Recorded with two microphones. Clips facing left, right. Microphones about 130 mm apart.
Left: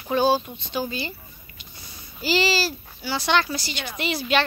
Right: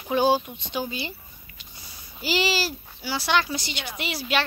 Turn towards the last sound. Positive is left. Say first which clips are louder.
# left 4 dB
turn(degrees=-10)  # may be behind; listen again after turning